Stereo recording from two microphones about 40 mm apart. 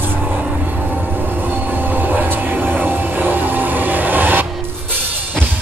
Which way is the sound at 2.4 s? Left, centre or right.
Right.